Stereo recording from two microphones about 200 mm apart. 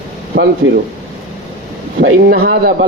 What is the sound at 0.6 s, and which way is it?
Speech, 75° right (ahead or behind).